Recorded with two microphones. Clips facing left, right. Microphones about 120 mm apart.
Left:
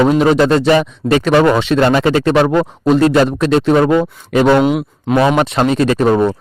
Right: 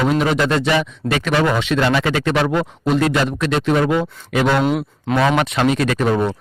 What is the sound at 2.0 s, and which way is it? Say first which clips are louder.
Speech: left 6 dB; 35° left (ahead or behind).